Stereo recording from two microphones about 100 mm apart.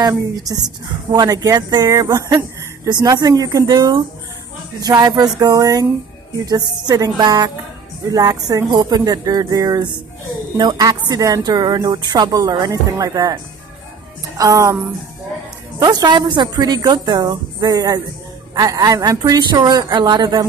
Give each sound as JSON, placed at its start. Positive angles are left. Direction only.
{"t": 0.0, "sound": "speech", "side_deg": -40}
{"t": 6.9, "sound": "a woman's voice", "side_deg": -40}
{"t": 14.3, "sound": "music", "side_deg": -35}
{"t": 15.8, "sound": "a woman's voice", "side_deg": -45}